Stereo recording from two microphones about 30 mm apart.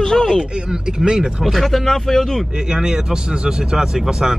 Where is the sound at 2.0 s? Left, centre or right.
Centre.